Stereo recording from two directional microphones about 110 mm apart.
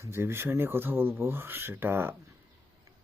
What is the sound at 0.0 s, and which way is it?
Speech, 25° right (ahead or behind).